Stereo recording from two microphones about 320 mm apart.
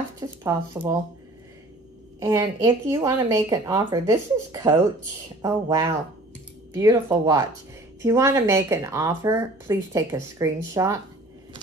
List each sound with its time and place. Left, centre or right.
0.4 s speech: centre
2.1 s speech: centre